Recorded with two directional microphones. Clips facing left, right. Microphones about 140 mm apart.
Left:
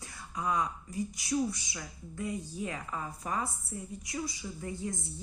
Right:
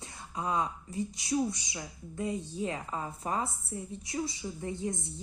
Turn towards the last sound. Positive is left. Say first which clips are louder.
# right 3 dB
turn(degrees=-25)  # may be behind; listen again after turning